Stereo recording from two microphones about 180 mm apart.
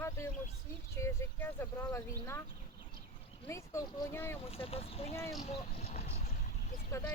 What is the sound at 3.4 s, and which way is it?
Speech, 15° left (ahead or behind).